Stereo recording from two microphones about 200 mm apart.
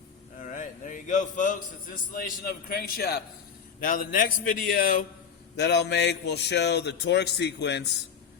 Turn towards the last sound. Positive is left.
turn(degrees=60)  # may be behind; listen again after turning